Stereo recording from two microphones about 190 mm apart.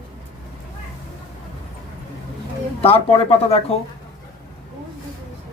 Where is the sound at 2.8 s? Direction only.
30° left (ahead or behind).